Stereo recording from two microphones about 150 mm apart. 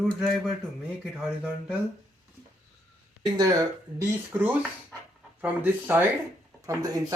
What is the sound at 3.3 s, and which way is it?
Speech, 25° right (ahead or behind).